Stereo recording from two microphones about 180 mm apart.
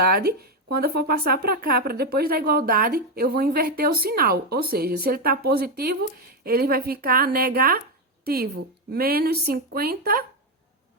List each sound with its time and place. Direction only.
0.0 s a woman's voice: 60° right (ahead or behind)